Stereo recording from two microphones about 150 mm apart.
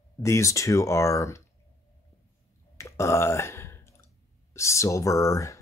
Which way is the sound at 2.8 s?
20° left (ahead or behind).